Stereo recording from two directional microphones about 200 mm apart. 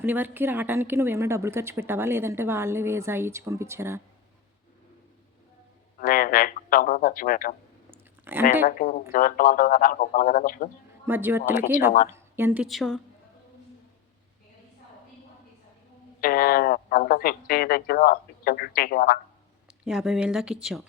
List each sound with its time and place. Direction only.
0.0 s speech: 10° right (ahead or behind)
6.0 s speech: 45° left (ahead or behind)
7.9 s a sound: 10° right (ahead or behind)
8.6 s speech: 45° left (ahead or behind)
11.0 s speech: 10° right (ahead or behind)
12.6 s a woman's voice: centre (ahead or behind)
16.2 s speech: 45° left (ahead or behind)
19.6 s speech: 5° right (ahead or behind)